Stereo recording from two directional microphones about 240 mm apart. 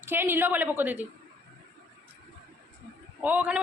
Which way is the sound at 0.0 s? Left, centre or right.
Centre.